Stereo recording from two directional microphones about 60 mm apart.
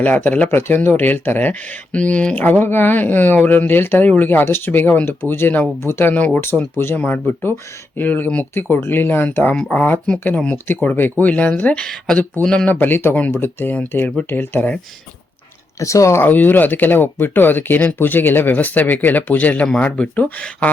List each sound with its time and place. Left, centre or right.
0.0 s speech: left
0.4 s speech: left
6.1 s speech: left
9.6 s speech: centre
12.8 s speech: left
15.8 s speech: left
16.2 s speech: left